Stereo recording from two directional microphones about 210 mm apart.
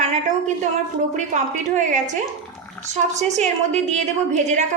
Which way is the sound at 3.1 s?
35° right (ahead or behind).